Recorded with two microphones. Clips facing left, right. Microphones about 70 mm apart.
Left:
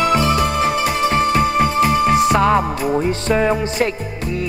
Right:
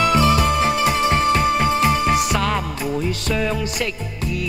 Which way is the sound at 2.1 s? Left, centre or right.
Left.